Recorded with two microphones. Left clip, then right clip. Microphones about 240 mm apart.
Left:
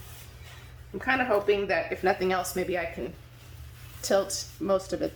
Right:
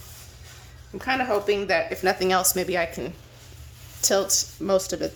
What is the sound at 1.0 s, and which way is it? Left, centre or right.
Speech, right.